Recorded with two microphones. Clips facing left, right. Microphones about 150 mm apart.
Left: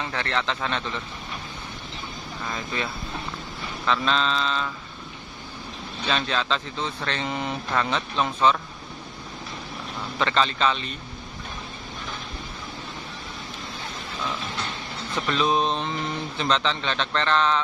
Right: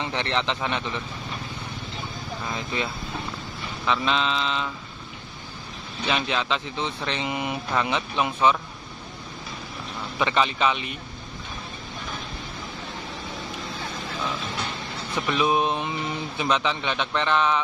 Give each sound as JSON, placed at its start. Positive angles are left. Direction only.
{"t": 0.0, "sound": "speech", "side_deg": -20}
{"t": 2.5, "sound": "speech", "side_deg": -20}
{"t": 6.0, "sound": "speech", "side_deg": -15}
{"t": 10.1, "sound": "speech", "side_deg": -15}
{"t": 15.1, "sound": "speech", "side_deg": -10}